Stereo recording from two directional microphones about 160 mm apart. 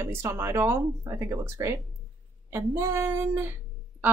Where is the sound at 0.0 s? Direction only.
15° right (ahead or behind).